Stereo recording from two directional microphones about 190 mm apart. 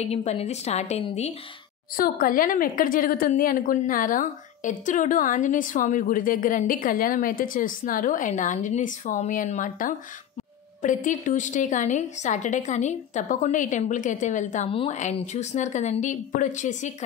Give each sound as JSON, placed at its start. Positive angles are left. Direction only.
{"t": 0.0, "sound": "a woman's voice", "side_deg": 35}
{"t": 2.0, "sound": "a woman's voice", "side_deg": 50}